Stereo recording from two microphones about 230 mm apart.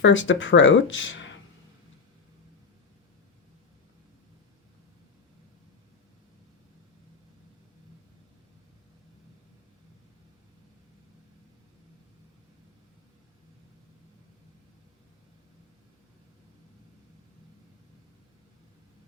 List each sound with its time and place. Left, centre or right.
0.0 s speech: left